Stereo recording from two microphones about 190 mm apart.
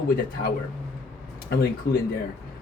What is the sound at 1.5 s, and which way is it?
Speech, 55° left (ahead or behind).